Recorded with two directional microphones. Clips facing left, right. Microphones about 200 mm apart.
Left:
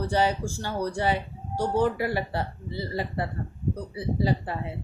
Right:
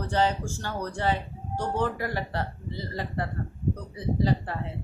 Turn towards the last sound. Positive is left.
turn(degrees=10)  # may be behind; listen again after turning